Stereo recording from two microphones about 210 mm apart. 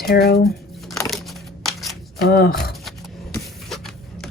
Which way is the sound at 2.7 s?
Centre (ahead or behind).